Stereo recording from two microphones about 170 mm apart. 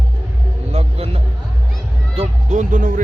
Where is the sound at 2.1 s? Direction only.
40° right (ahead or behind).